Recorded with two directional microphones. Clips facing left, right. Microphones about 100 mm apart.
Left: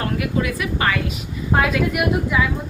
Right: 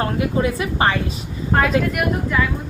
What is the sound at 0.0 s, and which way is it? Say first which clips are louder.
Speech: right 3 dB; 30° right (ahead or behind).